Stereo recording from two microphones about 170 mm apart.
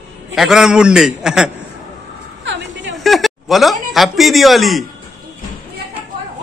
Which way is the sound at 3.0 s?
Centre (ahead or behind).